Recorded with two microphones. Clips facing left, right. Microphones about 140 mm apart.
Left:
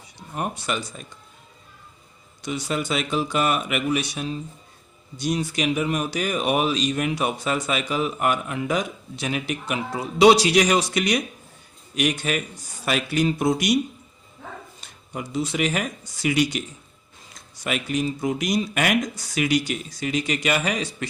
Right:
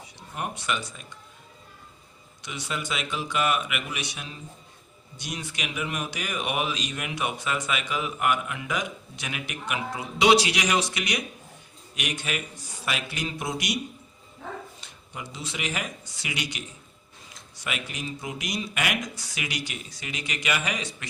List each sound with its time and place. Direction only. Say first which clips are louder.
0.3 s speech: left 3 dB; 35° left (ahead or behind)
2.4 s speech: left 7 dB; 40° left (ahead or behind)
15.1 s speech: left 10 dB; 45° left (ahead or behind)
17.6 s speech: left 9 dB; 40° left (ahead or behind)